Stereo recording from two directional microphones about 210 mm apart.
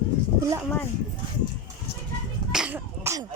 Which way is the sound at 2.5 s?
5° right (ahead or behind).